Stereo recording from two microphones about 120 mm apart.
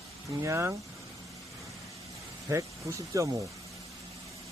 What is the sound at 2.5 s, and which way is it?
Speech, 25° right (ahead or behind).